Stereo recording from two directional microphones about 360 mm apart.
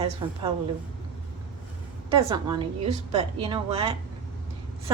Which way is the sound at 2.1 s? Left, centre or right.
Centre.